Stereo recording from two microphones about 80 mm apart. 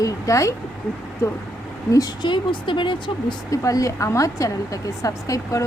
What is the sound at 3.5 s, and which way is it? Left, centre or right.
A woman's voice, left.